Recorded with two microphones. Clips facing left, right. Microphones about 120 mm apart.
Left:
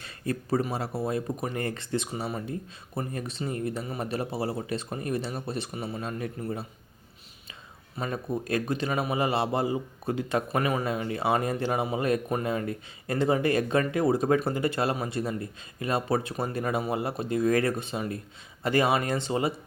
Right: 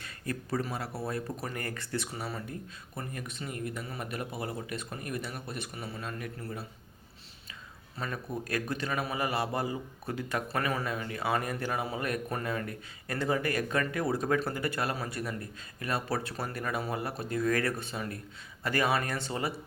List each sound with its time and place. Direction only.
0.0 s a sound: 25° left (ahead or behind)
0.7 s a man's voice: 25° left (ahead or behind)
7.9 s a man's voice: 20° left (ahead or behind)